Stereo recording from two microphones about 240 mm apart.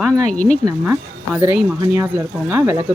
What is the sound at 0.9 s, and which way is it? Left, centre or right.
Speech, centre.